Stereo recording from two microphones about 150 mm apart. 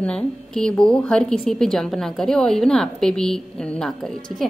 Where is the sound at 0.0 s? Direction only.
5° left (ahead or behind).